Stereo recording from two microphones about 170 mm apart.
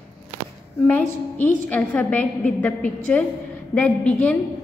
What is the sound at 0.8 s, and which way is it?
A woman's voice, 10° left (ahead or behind).